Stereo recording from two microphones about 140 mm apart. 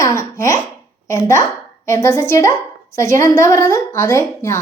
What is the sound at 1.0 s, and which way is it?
A woman's voice, 20° left (ahead or behind).